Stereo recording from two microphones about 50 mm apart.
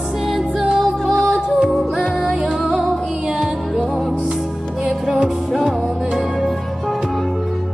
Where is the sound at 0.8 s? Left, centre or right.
Centre.